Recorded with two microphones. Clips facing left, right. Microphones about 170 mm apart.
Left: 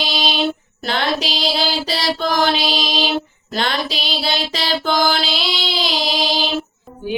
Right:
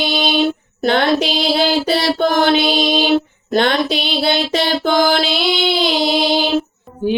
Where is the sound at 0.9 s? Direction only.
55° right (ahead or behind).